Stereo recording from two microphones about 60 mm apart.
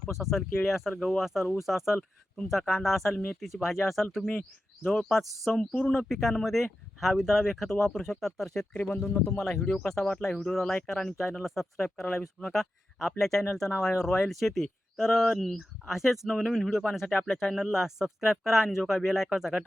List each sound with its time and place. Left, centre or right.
0.0 s speech: centre
2.0 s speech: centre
8.7 s speech: left
9.6 s speech: centre